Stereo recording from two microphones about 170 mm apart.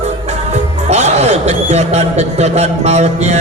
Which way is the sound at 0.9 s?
40° right (ahead or behind).